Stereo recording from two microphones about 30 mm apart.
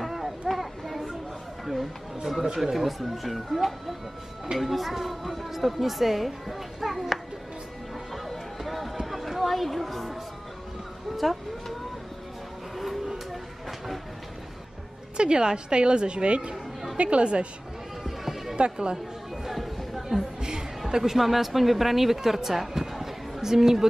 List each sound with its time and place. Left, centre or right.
0.5 s children playing: centre
2.4 s speech: right
3.0 s a woman's voice: centre
8.1 s music: centre
9.0 s a sound: centre
9.5 s speech: centre
11.1 s speech: centre
12.7 s a sound: centre
15.1 s a woman's voice: right
18.0 s music: centre
18.6 s a woman's voice: right
19.4 s chatter: centre
21.0 s a woman's voice: centre